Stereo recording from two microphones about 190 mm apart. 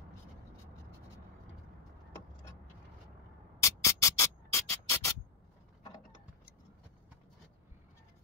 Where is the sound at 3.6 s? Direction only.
15° left (ahead or behind).